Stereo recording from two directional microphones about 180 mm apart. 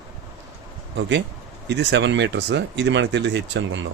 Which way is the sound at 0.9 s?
85° right.